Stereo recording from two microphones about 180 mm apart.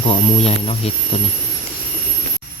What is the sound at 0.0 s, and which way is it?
Speech, 30° left (ahead or behind).